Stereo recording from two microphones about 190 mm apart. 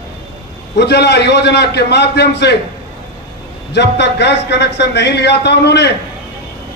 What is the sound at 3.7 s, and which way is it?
A man's voice, 65° left (ahead or behind).